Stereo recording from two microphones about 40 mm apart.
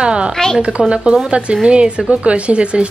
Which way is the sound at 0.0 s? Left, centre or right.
Right.